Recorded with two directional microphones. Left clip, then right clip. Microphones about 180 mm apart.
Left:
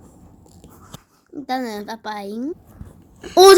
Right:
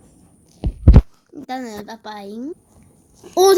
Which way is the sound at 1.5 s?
Centre (ahead or behind).